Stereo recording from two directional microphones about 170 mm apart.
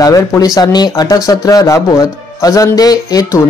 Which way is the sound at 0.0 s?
20° left (ahead or behind).